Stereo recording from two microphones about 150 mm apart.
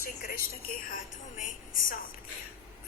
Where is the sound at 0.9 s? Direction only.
60° left (ahead or behind).